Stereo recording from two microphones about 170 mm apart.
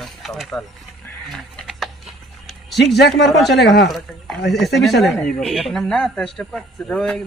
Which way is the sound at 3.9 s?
Centre (ahead or behind).